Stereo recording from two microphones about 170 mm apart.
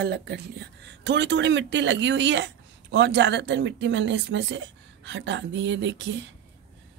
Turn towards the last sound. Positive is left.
turn(degrees=-90)